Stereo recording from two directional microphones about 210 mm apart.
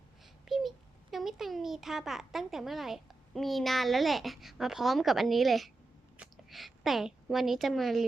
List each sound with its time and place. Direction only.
0.4 s babbling: centre (ahead or behind)
1.1 s a woman's voice: centre (ahead or behind)